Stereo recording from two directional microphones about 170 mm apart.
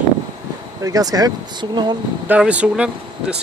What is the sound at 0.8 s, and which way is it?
Speech, 20° right (ahead or behind).